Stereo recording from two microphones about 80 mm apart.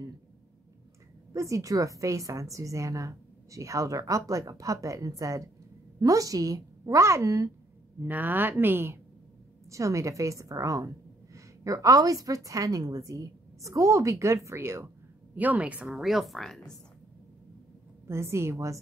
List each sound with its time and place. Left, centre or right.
1.3 s a woman's voice: right
8.0 s a woman's voice: right
9.7 s a woman's voice: right
15.3 s a woman's voice: right
16.0 s speech: centre
18.0 s a woman's voice: right